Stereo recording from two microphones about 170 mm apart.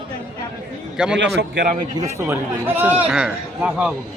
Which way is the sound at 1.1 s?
90° right.